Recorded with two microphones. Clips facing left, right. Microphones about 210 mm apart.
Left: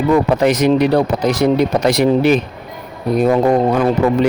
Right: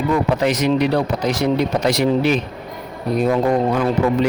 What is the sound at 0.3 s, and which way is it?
Speech, 50° left (ahead or behind).